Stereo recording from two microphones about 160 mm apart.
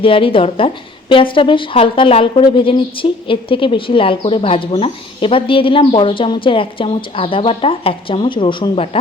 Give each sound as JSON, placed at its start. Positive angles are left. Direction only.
{"t": 0.0, "sound": "a woman's voice", "side_deg": 35}